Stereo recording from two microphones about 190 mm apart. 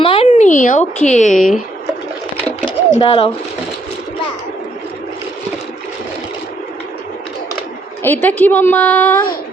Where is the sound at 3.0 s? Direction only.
25° left (ahead or behind).